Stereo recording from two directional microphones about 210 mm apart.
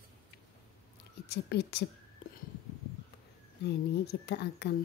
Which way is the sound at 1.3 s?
50° left (ahead or behind).